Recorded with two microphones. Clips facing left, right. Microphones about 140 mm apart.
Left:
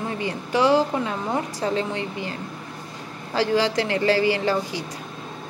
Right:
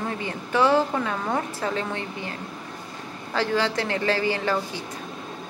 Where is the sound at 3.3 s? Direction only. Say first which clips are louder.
Left 3 dB; 35° left (ahead or behind).